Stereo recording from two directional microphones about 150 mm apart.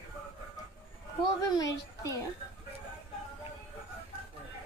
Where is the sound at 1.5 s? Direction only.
25° left (ahead or behind).